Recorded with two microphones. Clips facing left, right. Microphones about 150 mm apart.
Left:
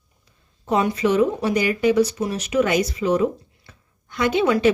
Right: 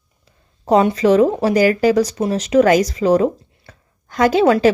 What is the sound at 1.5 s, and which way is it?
Speech, 90° right.